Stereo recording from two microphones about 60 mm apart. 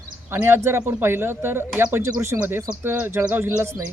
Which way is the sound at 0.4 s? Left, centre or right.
Right.